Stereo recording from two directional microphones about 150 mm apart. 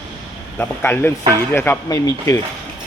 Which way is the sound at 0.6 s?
15° left (ahead or behind).